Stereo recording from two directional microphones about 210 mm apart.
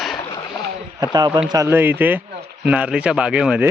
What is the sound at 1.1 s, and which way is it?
Speech, 20° right (ahead or behind).